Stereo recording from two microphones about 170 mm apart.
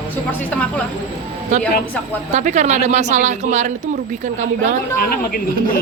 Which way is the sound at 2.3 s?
45° right (ahead or behind).